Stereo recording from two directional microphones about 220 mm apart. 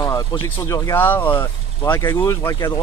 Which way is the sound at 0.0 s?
15° left (ahead or behind).